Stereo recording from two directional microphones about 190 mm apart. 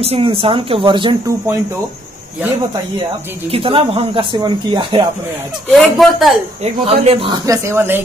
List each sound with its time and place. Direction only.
0.0 s speech: 30° right (ahead or behind)
3.5 s speech: 30° right (ahead or behind)
5.7 s speech: centre (ahead or behind)
6.6 s speech: 35° right (ahead or behind); by 8.0 s 10° right (ahead or behind)